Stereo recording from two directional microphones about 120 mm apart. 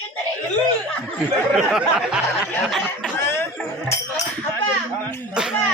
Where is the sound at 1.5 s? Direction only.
5° right (ahead or behind).